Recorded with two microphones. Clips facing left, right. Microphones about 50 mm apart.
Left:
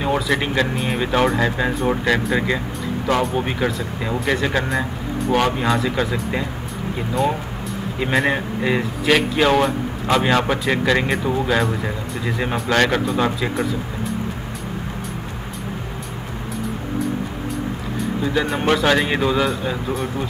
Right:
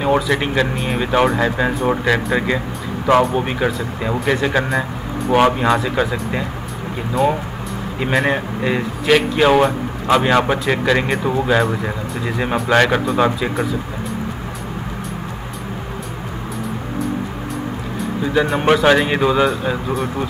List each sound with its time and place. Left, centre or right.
0.3 s speech: centre
5.3 s speech: centre
5.8 s speech: centre
18.2 s speech: centre